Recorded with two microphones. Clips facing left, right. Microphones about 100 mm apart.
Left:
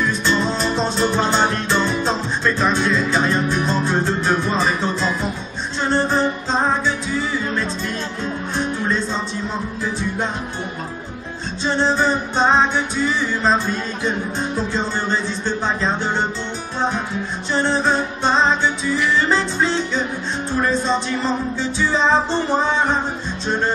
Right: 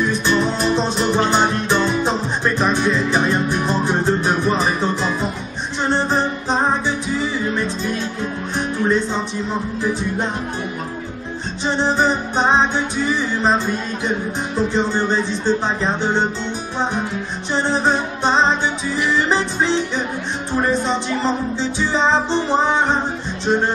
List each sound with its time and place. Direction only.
0.1 s music: 15° right (ahead or behind)
8.5 s music: 15° right (ahead or behind)
11.6 s music: 15° right (ahead or behind)
17.5 s music: 20° right (ahead or behind)